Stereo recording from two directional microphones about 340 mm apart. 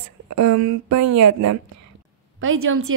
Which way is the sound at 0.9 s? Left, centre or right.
Right.